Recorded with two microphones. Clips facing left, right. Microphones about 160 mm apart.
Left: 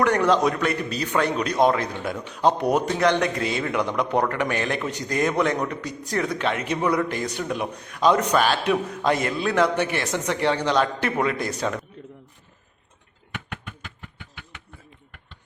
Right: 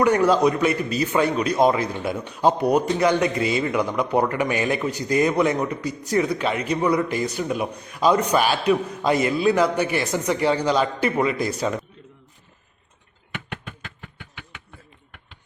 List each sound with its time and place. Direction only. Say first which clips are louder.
0.0 s a man's voice: right 2 dB; 5° right (ahead or behind)